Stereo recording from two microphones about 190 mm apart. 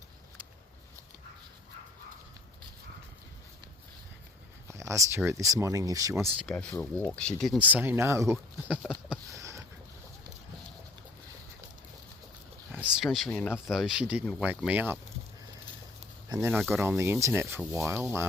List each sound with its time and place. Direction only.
4.7 s speech: 15° right (ahead or behind)
6.4 s speech: 5° left (ahead or behind); by 8.8 s 10° right (ahead or behind)
9.3 s a sound: 15° right (ahead or behind)
13.0 s speech: centre (ahead or behind)
13.3 s speech: 10° left (ahead or behind)
13.7 s speech: 5° right (ahead or behind)
16.3 s speech: 15° right (ahead or behind)